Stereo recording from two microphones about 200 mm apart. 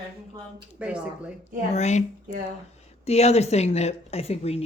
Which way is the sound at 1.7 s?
35° left (ahead or behind).